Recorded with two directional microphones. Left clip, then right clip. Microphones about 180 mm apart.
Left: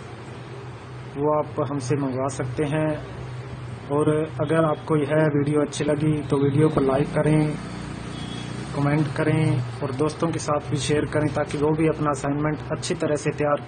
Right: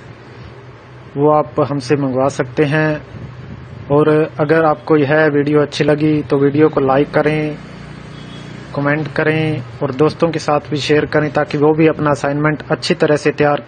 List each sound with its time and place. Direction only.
1.2 s a man's voice: 35° right (ahead or behind)
3.9 s a man's voice: 35° right (ahead or behind)
8.8 s a man's voice: 40° right (ahead or behind)